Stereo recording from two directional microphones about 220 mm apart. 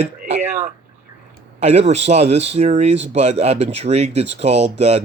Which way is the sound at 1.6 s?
30° right (ahead or behind).